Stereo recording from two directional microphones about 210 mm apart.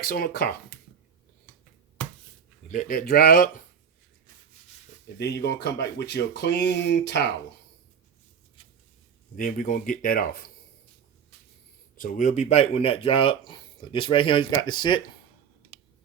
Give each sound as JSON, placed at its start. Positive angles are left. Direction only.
{"t": 0.0, "sound": "speech", "side_deg": 45}
{"t": 2.6, "sound": "speech", "side_deg": 40}
{"t": 5.2, "sound": "speech", "side_deg": 55}
{"t": 9.3, "sound": "speech", "side_deg": 40}
{"t": 11.9, "sound": "speech", "side_deg": 40}